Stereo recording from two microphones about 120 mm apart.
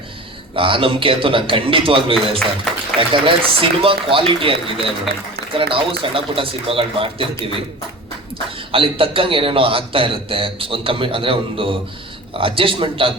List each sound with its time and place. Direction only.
0.5 s a man's voice: 50° right (ahead or behind)
5.1 s a man's voice: centre (ahead or behind)
5.5 s a man's voice: 45° right (ahead or behind)
8.7 s a man's voice: 50° right (ahead or behind)